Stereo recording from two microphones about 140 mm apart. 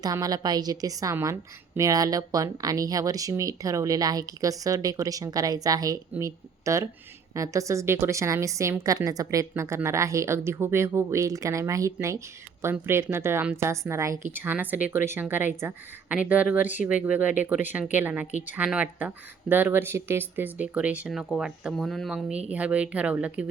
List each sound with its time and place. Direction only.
0.0 s a woman's voice: 25° right (ahead or behind); by 18.3 s 10° right (ahead or behind)
18.3 s speech: 60° left (ahead or behind)
18.5 s speech: 10° right (ahead or behind)